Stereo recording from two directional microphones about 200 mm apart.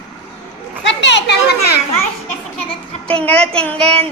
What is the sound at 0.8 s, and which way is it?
Speech, 60° left (ahead or behind).